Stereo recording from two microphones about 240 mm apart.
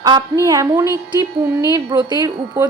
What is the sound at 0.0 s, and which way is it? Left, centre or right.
A woman's voice, centre.